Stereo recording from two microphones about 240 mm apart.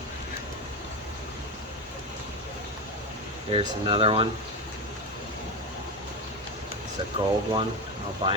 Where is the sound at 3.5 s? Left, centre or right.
Right.